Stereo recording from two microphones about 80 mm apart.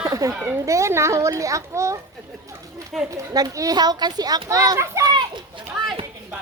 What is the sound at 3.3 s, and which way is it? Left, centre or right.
A woman's voice, right.